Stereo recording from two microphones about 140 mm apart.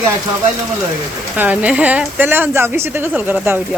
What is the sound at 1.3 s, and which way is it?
Speech, 10° right (ahead or behind).